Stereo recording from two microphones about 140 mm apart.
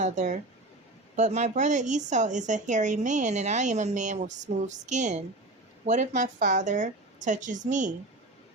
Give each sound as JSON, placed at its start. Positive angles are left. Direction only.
{"t": 0.0, "sound": "speech", "side_deg": -60}